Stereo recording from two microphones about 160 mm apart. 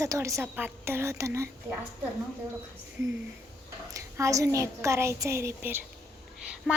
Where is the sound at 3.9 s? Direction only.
20° right (ahead or behind).